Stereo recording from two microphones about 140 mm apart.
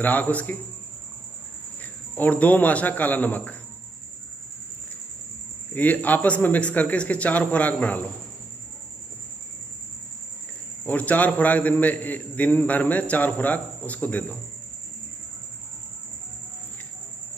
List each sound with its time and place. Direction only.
0.0 s a man's voice: 10° left (ahead or behind)
2.1 s a man's voice: 10° left (ahead or behind)
5.8 s a man's voice: 10° left (ahead or behind)
10.9 s a man's voice: 10° left (ahead or behind)